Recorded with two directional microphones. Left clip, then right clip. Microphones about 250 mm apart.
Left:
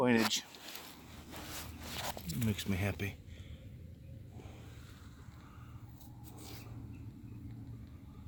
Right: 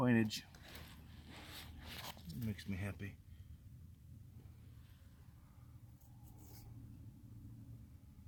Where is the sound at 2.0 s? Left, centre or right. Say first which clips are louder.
Left 11 dB; centre.